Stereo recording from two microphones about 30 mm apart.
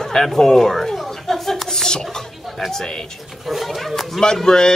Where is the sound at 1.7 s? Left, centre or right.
Centre.